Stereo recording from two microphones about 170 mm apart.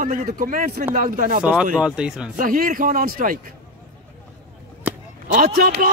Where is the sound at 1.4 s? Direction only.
5° right (ahead or behind).